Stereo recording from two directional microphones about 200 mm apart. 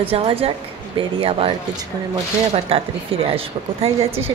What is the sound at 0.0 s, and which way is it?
Speech, 30° right (ahead or behind).